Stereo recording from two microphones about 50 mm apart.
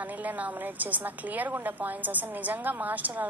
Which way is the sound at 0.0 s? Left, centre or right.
Right.